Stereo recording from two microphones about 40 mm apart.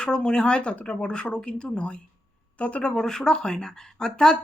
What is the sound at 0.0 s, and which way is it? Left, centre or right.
Speech, left.